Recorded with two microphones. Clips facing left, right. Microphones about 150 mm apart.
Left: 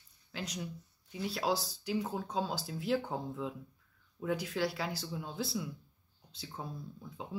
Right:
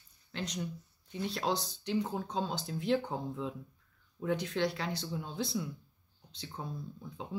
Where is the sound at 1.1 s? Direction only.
5° left (ahead or behind).